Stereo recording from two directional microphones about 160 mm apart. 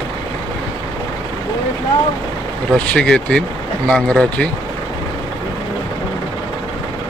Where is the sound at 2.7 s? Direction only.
5° left (ahead or behind).